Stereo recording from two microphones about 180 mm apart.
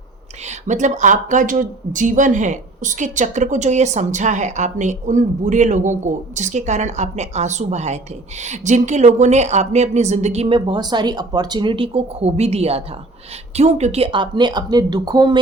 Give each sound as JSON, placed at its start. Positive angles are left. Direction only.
{"t": 0.4, "sound": "speech", "side_deg": -40}